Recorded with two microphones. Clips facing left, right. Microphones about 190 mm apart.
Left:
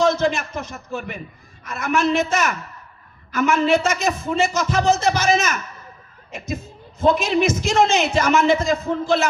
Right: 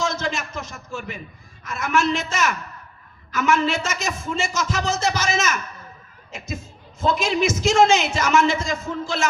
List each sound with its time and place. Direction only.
0.0 s a man's voice: 55° left (ahead or behind)
7.0 s a man's voice: 55° left (ahead or behind)